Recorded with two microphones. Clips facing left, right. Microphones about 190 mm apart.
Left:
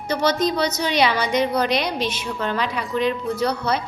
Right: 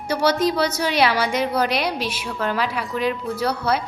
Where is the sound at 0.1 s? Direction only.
10° right (ahead or behind).